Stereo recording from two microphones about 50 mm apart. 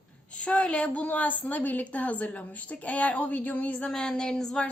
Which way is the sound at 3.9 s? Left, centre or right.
Centre.